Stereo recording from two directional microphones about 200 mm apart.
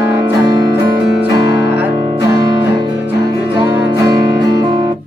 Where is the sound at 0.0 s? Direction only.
10° right (ahead or behind).